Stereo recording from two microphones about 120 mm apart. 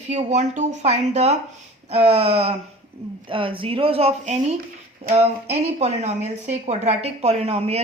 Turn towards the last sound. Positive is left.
turn(degrees=-60)  # may be behind; listen again after turning